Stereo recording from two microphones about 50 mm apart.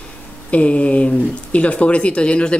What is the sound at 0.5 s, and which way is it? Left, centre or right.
Speech, left.